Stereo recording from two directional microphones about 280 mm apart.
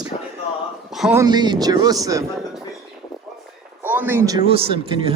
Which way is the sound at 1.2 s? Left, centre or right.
Centre.